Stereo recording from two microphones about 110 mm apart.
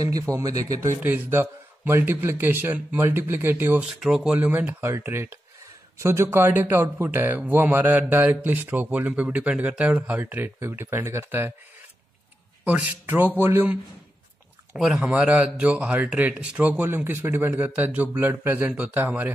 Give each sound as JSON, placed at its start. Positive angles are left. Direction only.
{"t": 0.2, "sound": "a man's voice", "side_deg": -30}
{"t": 4.0, "sound": "a man's voice", "side_deg": -5}
{"t": 12.6, "sound": "a man's voice", "side_deg": -15}
{"t": 14.7, "sound": "speech", "side_deg": -5}